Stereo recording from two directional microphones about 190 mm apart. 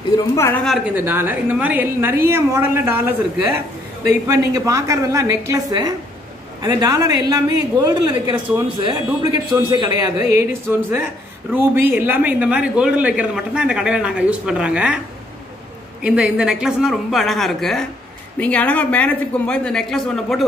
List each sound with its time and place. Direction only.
0.7 s a woman's voice: 5° right (ahead or behind)
16.0 s a man's voice: 5° right (ahead or behind)